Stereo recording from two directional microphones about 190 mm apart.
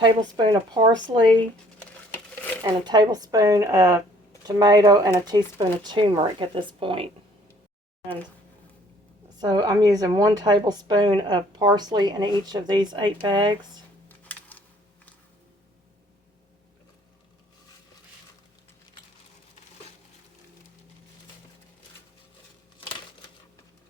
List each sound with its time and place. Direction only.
0.0 s a woman's voice: 25° right (ahead or behind)
2.3 s a sound: 10° left (ahead or behind)
2.6 s a woman's voice: 20° right (ahead or behind)
9.4 s a woman's voice: 20° right (ahead or behind)